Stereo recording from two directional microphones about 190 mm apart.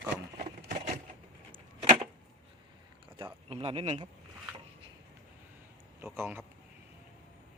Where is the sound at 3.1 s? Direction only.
30° right (ahead or behind).